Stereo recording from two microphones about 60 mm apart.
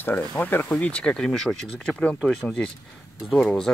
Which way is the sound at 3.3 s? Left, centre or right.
Centre.